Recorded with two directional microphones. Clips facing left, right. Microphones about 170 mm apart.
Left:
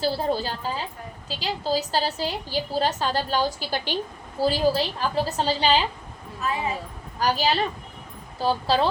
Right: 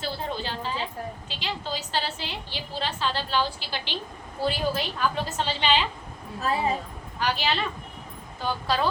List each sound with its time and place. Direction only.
0.0 s a woman's voice: 35° left (ahead or behind)
6.4 s speech: 35° right (ahead or behind)
7.2 s a woman's voice: 40° left (ahead or behind)